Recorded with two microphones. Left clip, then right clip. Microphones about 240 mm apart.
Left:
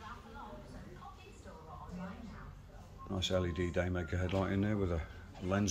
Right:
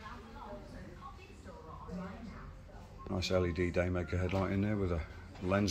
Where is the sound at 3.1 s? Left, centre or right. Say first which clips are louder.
Right 2 dB; centre.